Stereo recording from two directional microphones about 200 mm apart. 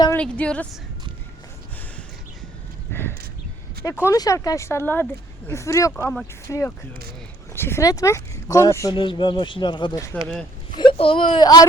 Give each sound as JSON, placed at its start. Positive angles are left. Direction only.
{"t": 0.2, "sound": "speech", "side_deg": 5}
{"t": 2.9, "sound": "speech", "side_deg": 10}